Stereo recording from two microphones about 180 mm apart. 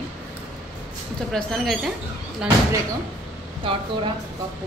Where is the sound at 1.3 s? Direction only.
Centre (ahead or behind).